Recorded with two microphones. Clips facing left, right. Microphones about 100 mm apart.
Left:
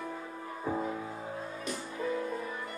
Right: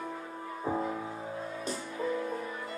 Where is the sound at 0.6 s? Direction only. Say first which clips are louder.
Right 1 dB; 15° right (ahead or behind).